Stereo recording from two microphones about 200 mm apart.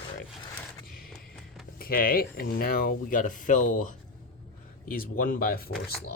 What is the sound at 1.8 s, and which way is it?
Speech, 45° left (ahead or behind).